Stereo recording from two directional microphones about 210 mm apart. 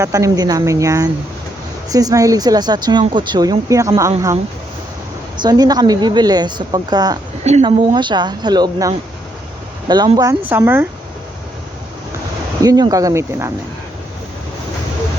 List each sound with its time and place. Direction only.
0.0 s speech: 15° right (ahead or behind)
5.4 s a woman's voice: 20° right (ahead or behind)
12.6 s speech: 15° right (ahead or behind)